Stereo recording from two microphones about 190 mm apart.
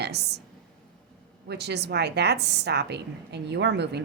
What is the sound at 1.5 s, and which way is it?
A woman's voice, 60° right (ahead or behind).